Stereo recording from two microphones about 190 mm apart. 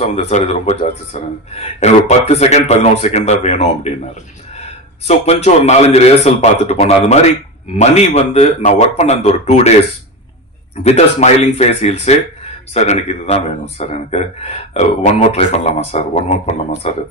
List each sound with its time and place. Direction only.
0.3 s speech: 35° left (ahead or behind)
5.0 s speech: 35° left (ahead or behind)
10.8 s speech: 35° left (ahead or behind)